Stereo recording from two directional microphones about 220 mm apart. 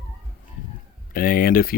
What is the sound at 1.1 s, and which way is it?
Speech, 40° left (ahead or behind).